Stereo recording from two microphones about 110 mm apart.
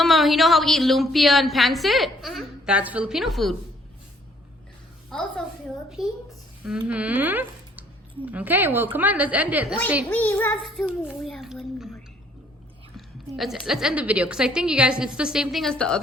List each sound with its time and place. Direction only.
0.0 s a woman's voice: centre (ahead or behind)
2.7 s a woman's voice: 10° right (ahead or behind)
5.1 s a woman's voice: 5° left (ahead or behind); by 9.7 s 15° right (ahead or behind)
10.1 s child singing: 20° left (ahead or behind)
11.0 s a woman's voice: 10° right (ahead or behind)
13.3 s a woman's voice: centre (ahead or behind)